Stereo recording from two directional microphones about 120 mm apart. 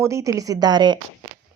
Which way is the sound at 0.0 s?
25° right (ahead or behind).